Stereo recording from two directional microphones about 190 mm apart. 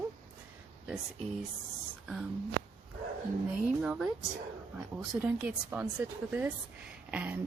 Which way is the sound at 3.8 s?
5° right (ahead or behind).